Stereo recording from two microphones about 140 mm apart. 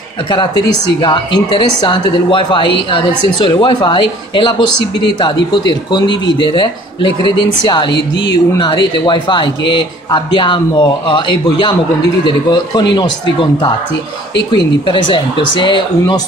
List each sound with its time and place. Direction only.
1.0 s speech: 35° left (ahead or behind)